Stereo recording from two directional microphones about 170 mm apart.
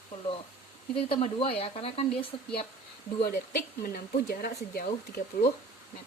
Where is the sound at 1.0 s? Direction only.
30° left (ahead or behind).